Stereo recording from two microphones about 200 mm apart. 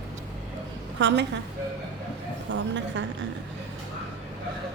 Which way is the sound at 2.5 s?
65° right (ahead or behind).